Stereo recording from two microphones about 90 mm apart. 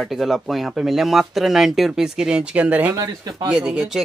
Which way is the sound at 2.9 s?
40° right (ahead or behind).